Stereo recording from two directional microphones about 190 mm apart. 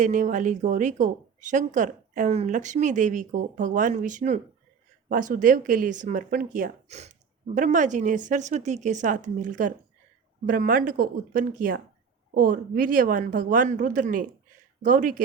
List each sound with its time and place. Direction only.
0.0 s speech: 40° right (ahead or behind)